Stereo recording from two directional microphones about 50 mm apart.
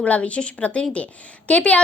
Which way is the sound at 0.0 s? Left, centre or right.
Left.